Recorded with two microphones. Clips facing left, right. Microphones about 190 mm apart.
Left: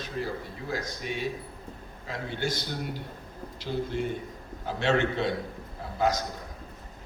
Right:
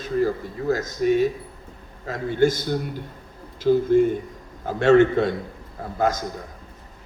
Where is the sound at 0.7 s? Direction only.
45° right (ahead or behind).